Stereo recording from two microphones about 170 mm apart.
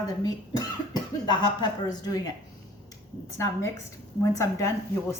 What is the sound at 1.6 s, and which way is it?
Speech, 20° left (ahead or behind).